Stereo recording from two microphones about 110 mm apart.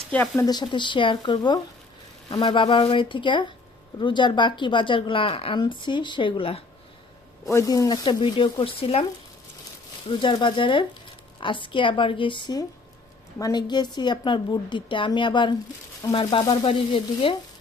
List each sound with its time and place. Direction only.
0.3 s speech: 40° left (ahead or behind); by 6.6 s 55° left (ahead or behind)
7.4 s speech: 25° left (ahead or behind)
8.2 s speech: 50° left (ahead or behind)
10.1 s speech: 50° left (ahead or behind)